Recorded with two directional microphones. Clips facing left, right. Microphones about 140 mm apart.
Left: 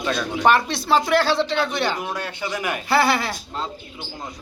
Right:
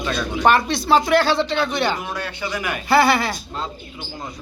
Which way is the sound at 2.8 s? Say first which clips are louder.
Right 4 dB; centre (ahead or behind).